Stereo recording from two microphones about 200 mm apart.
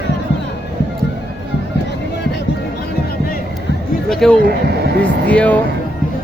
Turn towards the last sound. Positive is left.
turn(degrees=5)  # may be behind; listen again after turning